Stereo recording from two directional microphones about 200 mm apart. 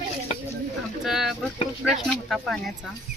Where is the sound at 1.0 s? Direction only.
Centre (ahead or behind).